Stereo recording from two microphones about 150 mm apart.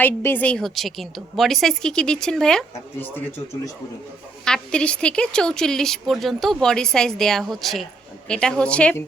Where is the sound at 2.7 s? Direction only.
15° left (ahead or behind).